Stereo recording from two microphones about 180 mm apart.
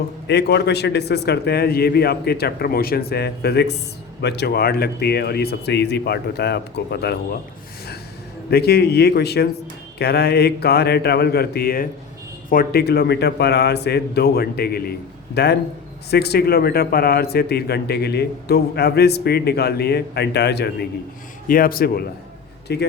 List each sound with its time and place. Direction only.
0.3 s a man's voice: 70° left (ahead or behind)
8.4 s a man's voice: 60° left (ahead or behind)
21.4 s a man's voice: 55° left (ahead or behind)
22.7 s speech: 65° left (ahead or behind)